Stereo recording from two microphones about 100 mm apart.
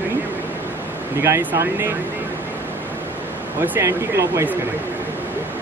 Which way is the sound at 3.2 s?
20° right (ahead or behind).